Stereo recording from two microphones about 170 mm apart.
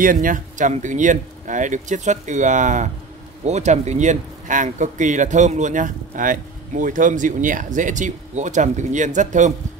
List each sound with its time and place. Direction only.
0.0 s speech: 55° right (ahead or behind)